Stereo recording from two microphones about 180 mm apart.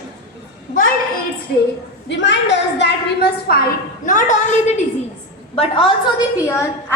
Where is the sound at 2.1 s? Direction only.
80° left.